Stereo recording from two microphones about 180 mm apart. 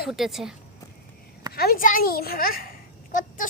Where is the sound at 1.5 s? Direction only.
55° left (ahead or behind).